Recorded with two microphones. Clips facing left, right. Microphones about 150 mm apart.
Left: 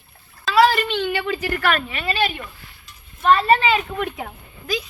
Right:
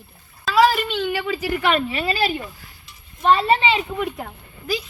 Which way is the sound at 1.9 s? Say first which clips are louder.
Right 1 dB; 35° right (ahead or behind).